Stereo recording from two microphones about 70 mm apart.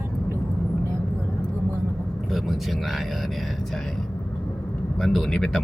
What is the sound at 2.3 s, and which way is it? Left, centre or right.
Speech, centre.